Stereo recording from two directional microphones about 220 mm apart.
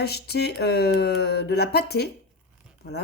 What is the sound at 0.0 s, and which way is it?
Speech, 45° left (ahead or behind).